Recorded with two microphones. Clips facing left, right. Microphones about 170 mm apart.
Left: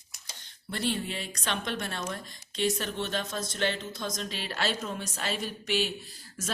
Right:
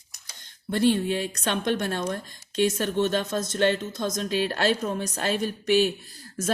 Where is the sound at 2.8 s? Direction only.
50° right (ahead or behind).